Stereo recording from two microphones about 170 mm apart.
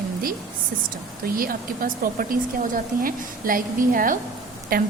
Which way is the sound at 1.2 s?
55° right (ahead or behind).